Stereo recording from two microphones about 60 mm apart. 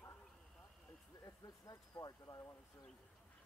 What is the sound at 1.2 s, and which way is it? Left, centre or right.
Speech, left.